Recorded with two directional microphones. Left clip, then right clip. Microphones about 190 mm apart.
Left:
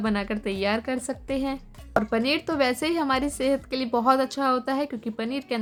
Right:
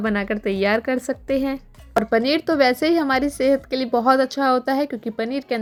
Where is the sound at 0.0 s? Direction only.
25° right (ahead or behind).